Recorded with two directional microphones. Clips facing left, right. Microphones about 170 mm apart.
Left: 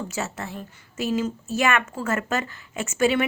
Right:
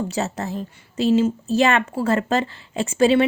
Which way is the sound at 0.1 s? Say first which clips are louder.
Right 6 dB; 35° right (ahead or behind).